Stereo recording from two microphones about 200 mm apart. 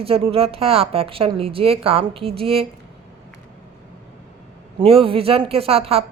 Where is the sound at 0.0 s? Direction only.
30° right (ahead or behind).